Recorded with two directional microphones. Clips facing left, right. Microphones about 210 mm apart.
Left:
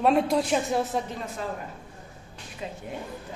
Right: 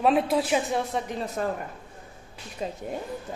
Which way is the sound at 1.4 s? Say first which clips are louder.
Right 6 dB; 50° right (ahead or behind).